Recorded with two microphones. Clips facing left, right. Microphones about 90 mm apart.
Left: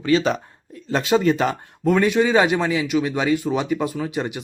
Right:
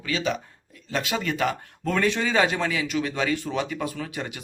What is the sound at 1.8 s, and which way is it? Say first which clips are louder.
Speech: left 7 dB; 15° left (ahead or behind).